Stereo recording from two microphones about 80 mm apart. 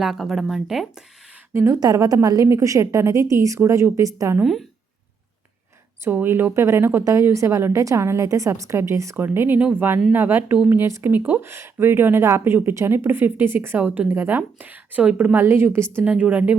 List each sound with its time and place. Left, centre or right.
0.0 s speech: centre
1.7 s a woman's voice: right
6.1 s a woman's voice: right
15.4 s speech: right
16.0 s speech: centre